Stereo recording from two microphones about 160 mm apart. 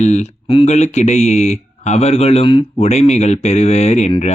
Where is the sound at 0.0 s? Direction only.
45° left (ahead or behind).